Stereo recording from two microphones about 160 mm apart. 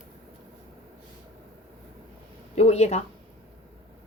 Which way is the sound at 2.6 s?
40° left (ahead or behind).